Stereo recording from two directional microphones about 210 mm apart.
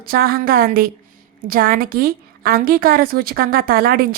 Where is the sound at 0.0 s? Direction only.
45° right (ahead or behind).